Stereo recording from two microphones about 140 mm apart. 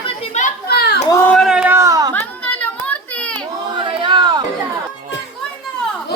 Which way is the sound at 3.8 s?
35° right (ahead or behind).